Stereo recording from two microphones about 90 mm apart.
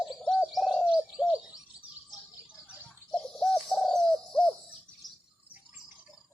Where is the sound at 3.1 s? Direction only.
5° left (ahead or behind).